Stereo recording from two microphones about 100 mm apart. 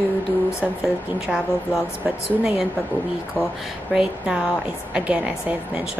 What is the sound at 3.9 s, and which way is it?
A woman's voice, 5° right (ahead or behind).